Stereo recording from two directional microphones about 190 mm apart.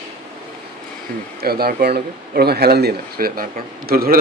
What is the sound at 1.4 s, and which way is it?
Speech, 55° right (ahead or behind).